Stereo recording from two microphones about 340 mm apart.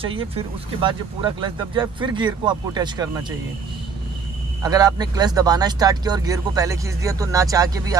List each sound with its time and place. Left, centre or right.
0.0 s speech: centre
4.6 s speech: centre